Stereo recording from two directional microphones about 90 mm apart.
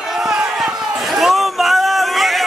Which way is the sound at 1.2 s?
Centre (ahead or behind).